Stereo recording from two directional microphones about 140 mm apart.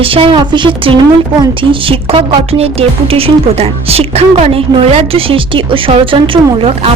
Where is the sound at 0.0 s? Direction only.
40° right (ahead or behind).